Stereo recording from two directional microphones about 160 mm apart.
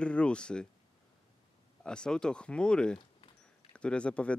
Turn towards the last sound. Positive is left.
turn(degrees=5)  # may be behind; listen again after turning